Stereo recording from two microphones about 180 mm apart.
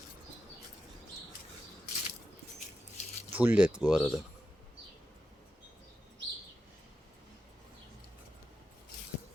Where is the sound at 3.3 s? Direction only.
10° right (ahead or behind).